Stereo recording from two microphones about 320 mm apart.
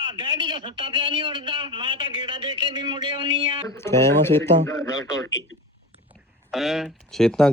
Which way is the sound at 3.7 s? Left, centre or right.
Centre.